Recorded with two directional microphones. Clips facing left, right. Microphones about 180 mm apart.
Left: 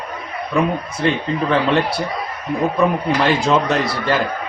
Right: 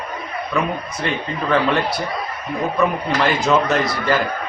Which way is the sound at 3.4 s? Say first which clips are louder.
Even; 30° left (ahead or behind).